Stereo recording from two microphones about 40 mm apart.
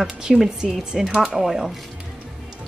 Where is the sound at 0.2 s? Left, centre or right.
Centre.